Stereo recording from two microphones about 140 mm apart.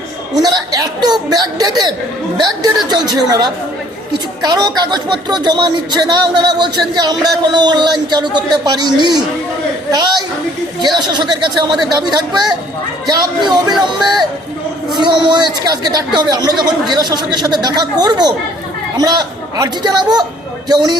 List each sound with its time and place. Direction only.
0.3 s speech: 25° right (ahead or behind)
3.1 s a woman's voice: 30° right (ahead or behind)
14.9 s a woman's voice: 35° right (ahead or behind)